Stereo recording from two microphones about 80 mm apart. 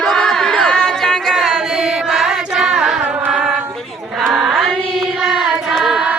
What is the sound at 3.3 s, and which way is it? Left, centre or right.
Female singing, centre.